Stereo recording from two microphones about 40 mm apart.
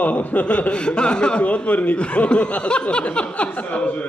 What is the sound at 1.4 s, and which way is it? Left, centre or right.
Speech, left.